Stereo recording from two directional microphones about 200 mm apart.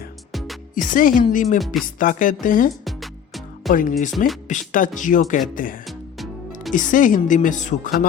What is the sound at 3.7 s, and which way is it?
Speech, 45° left (ahead or behind).